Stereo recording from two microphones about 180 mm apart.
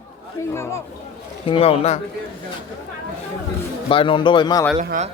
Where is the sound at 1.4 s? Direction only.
30° left (ahead or behind).